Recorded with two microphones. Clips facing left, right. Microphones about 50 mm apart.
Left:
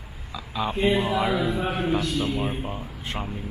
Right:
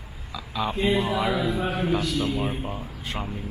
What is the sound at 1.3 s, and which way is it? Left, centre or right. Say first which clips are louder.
Speech: even; centre.